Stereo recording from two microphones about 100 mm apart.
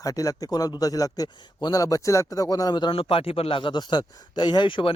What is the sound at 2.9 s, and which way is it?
Speech, 70° left (ahead or behind).